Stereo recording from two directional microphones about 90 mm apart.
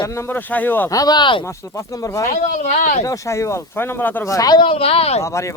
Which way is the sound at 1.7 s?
35° left (ahead or behind).